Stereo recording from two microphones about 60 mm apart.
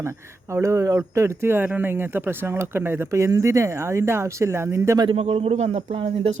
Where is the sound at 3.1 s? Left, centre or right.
Right.